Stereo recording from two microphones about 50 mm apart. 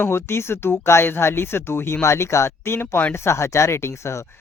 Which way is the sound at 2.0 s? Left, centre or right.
Left.